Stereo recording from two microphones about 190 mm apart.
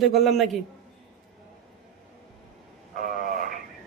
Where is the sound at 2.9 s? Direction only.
45° right (ahead or behind).